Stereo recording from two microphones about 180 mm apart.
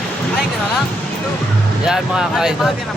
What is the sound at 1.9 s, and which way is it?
Speech, 5° right (ahead or behind).